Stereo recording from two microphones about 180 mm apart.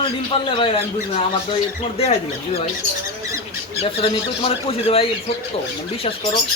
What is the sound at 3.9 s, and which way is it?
Speech, 30° left (ahead or behind).